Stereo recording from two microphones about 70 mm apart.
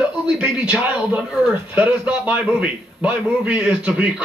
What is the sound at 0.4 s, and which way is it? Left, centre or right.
A man's voice, centre.